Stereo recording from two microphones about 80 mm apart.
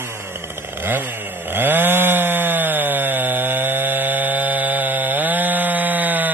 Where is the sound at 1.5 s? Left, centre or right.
Right.